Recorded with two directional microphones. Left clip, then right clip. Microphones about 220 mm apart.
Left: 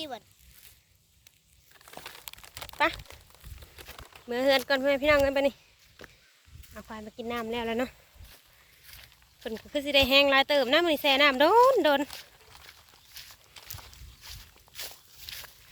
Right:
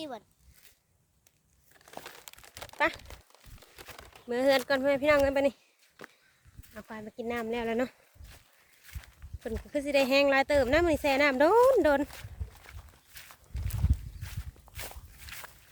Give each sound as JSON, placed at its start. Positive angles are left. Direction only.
{"t": 2.0, "sound": "crumpling", "side_deg": -15}
{"t": 2.7, "sound": "speech", "side_deg": 10}
{"t": 3.6, "sound": "speech", "side_deg": -5}
{"t": 6.0, "sound": "walk", "side_deg": 5}
{"t": 6.7, "sound": "speech", "side_deg": 0}
{"t": 9.4, "sound": "speech", "side_deg": 0}
{"t": 13.1, "sound": "walk", "side_deg": 0}